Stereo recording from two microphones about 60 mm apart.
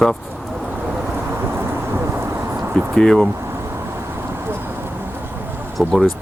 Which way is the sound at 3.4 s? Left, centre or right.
Right.